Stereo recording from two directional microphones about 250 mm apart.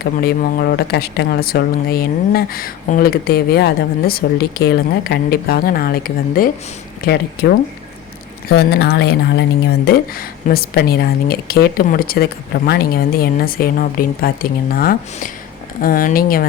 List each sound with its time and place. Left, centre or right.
0.0 s speech: left
8.4 s speech: left